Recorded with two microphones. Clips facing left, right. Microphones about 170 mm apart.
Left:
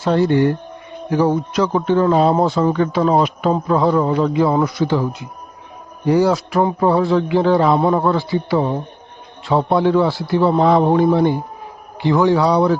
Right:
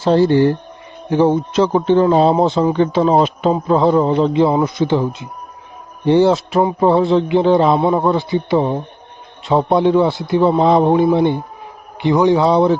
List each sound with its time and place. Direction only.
0.0 s speech: 30° right (ahead or behind)